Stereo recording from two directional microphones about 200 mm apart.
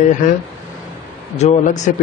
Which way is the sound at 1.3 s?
35° left (ahead or behind).